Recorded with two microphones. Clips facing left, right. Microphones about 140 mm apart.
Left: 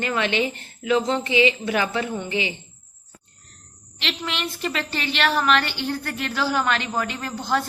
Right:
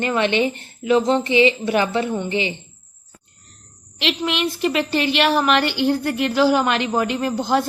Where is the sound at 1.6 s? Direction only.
25° right (ahead or behind).